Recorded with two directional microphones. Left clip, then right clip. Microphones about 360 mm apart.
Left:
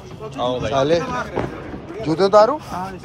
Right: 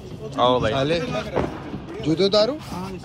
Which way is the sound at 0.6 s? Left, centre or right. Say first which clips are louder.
Left 4 dB; centre.